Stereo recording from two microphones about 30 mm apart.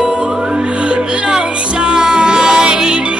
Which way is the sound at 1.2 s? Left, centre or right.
Right.